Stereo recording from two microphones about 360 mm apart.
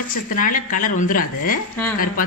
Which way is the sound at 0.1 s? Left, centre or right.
Left.